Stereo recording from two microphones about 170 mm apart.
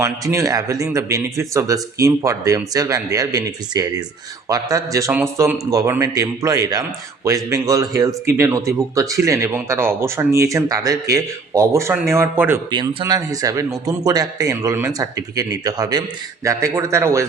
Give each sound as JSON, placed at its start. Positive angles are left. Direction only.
{"t": 0.0, "sound": "speech", "side_deg": -15}
{"t": 12.7, "sound": "speech", "side_deg": -25}